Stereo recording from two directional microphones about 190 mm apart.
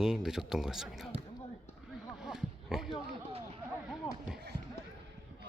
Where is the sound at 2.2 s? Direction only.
Centre (ahead or behind).